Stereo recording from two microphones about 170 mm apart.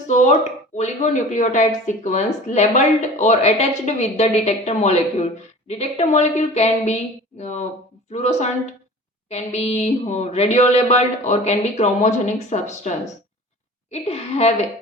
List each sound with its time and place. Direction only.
0.8 s speech: 45° left (ahead or behind)
13.9 s speech: 40° left (ahead or behind)